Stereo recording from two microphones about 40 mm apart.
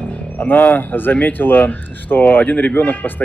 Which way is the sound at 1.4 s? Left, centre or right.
Left.